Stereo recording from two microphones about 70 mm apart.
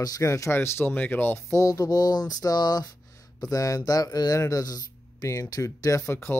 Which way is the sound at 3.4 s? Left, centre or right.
Left.